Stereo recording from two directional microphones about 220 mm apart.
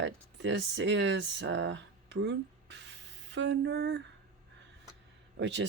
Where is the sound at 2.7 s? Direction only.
55° right (ahead or behind).